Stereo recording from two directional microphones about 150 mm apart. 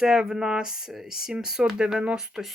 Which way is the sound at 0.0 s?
5° right (ahead or behind).